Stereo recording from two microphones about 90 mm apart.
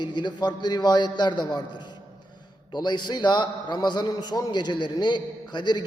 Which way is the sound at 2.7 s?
55° left (ahead or behind).